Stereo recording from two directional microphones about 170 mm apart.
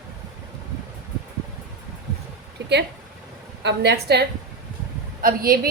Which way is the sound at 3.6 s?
80° right.